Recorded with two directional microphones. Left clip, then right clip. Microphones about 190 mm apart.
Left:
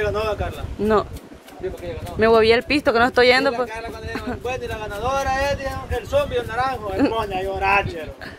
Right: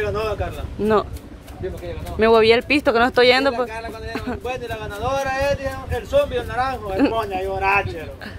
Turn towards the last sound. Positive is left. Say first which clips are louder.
# even
turn(degrees=20)  # may be behind; listen again after turning